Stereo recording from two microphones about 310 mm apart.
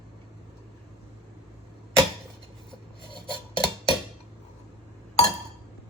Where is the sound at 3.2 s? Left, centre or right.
Centre.